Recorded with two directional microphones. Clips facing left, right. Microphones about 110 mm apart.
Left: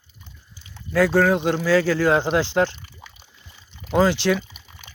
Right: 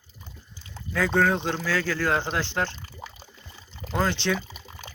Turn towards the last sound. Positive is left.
turn(degrees=5)  # may be behind; listen again after turning